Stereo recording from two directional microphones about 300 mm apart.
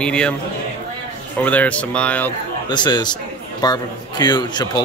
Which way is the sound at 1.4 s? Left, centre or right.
Centre.